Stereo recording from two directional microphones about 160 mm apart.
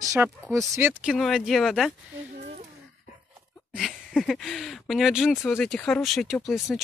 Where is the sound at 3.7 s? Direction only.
Centre (ahead or behind).